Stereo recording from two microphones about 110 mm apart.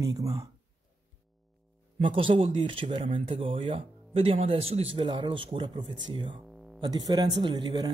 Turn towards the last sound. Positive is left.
turn(degrees=-40)  # may be behind; listen again after turning